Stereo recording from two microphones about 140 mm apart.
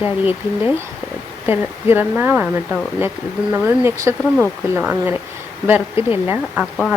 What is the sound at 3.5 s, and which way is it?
Speech, 15° right (ahead or behind).